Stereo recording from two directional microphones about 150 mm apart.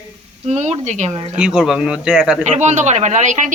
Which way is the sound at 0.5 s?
50° right (ahead or behind).